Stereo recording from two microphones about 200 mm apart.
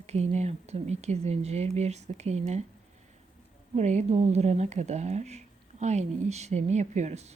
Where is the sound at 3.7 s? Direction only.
35° right (ahead or behind).